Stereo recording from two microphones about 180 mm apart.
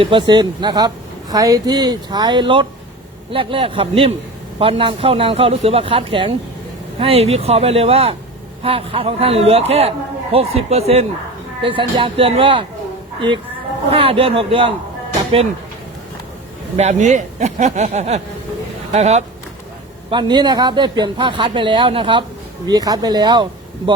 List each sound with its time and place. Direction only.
0.0 s a man's voice: 25° right (ahead or behind)
16.7 s a man's voice: 40° right (ahead or behind)
20.1 s speech: 25° right (ahead or behind)